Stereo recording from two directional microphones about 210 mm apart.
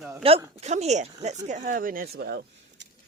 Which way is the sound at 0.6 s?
30° right (ahead or behind).